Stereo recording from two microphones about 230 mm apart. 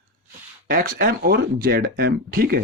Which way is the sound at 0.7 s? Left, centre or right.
Right.